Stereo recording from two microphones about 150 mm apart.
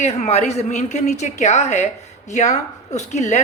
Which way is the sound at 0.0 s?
45° left (ahead or behind).